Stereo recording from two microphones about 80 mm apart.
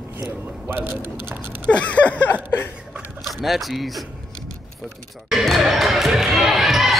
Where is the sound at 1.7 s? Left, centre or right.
Centre.